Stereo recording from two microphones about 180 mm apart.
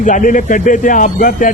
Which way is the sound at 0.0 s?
45° left (ahead or behind).